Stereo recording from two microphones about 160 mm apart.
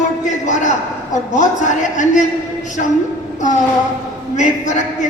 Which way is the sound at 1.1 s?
50° left (ahead or behind).